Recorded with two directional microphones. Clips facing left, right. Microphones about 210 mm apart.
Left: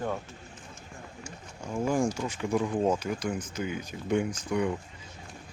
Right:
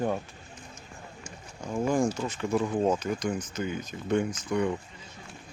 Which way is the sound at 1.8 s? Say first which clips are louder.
Right 1 dB; 10° left (ahead or behind).